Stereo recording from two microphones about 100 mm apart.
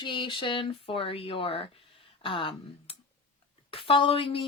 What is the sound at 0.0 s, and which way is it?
Speech, 55° left (ahead or behind).